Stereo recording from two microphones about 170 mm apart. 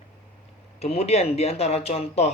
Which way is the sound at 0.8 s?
40° left (ahead or behind).